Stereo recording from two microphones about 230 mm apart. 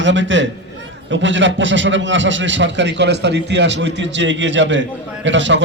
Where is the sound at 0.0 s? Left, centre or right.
Right.